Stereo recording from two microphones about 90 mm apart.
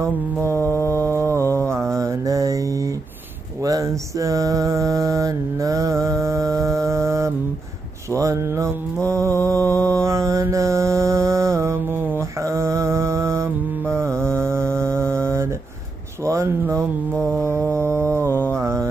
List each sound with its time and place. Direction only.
0.0 s mantra: 30° right (ahead or behind)
0.6 s music: 25° left (ahead or behind)
1.3 s mantra: 30° right (ahead or behind)
3.6 s mantra: 40° right (ahead or behind)
12.4 s mantra: 35° right (ahead or behind)
16.3 s a sound: 35° right (ahead or behind)
17.6 s mantra: 30° right (ahead or behind)